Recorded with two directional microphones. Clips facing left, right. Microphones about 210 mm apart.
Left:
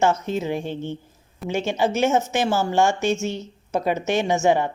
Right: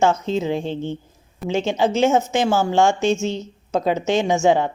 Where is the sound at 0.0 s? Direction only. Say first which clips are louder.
Right 2 dB; 20° right (ahead or behind).